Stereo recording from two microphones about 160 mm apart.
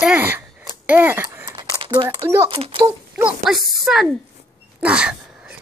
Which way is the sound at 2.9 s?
15° right (ahead or behind).